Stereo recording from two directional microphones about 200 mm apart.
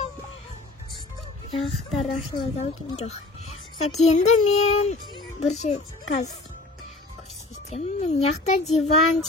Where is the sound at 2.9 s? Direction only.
35° left (ahead or behind).